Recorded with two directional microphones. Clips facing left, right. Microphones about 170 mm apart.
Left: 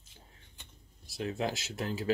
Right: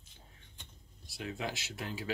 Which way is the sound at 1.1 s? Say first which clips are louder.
Left 5 dB; 40° left (ahead or behind).